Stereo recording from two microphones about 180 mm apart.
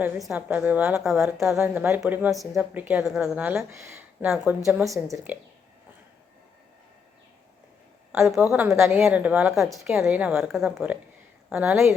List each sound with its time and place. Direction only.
0.0 s a woman's voice: 5° right (ahead or behind)
4.9 s a woman's voice: 15° right (ahead or behind)
8.5 s a woman's voice: 15° right (ahead or behind)
8.8 s a woman's voice: centre (ahead or behind)